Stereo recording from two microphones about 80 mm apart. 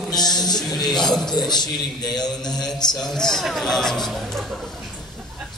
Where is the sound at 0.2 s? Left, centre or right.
Left.